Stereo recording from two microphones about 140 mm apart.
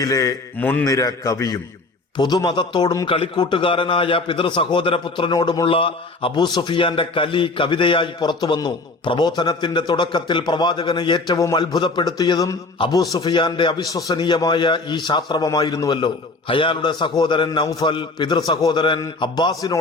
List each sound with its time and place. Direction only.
0.0 s a man's voice: 25° left (ahead or behind)
0.6 s a man's voice: 15° left (ahead or behind)
0.9 s a man's voice: 25° left (ahead or behind)